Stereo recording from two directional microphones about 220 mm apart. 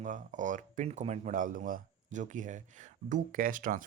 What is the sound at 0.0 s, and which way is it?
Speech, 35° right (ahead or behind).